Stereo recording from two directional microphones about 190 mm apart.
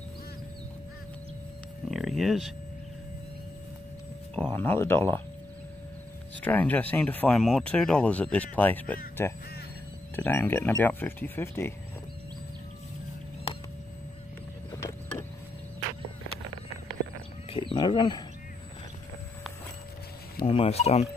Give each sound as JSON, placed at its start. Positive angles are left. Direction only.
{"t": 1.9, "sound": "a sound", "side_deg": 0}
{"t": 4.4, "sound": "speech", "side_deg": 10}
{"t": 6.4, "sound": "speech", "side_deg": 10}
{"t": 14.7, "sound": "boat", "side_deg": 15}
{"t": 17.5, "sound": "a sound", "side_deg": 25}
{"t": 20.4, "sound": "speech", "side_deg": 30}